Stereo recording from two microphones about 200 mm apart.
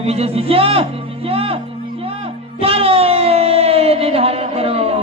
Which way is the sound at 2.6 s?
30° right (ahead or behind).